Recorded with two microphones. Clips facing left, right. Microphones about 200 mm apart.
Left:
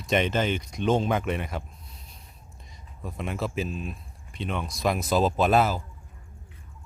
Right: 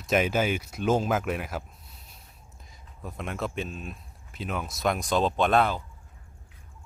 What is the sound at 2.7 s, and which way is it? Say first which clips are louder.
Speech: left 2 dB; centre (ahead or behind).